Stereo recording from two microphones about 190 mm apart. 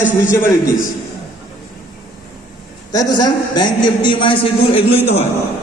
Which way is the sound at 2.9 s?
20° left (ahead or behind).